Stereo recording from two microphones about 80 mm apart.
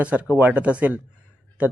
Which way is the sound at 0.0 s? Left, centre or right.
Centre.